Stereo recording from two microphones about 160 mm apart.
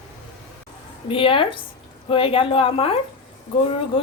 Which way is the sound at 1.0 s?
35° left (ahead or behind).